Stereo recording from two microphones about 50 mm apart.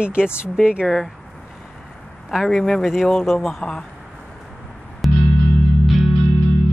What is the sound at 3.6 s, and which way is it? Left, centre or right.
Speech, centre.